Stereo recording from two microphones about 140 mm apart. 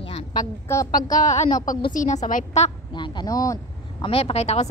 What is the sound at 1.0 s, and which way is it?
A woman's voice, 65° left (ahead or behind).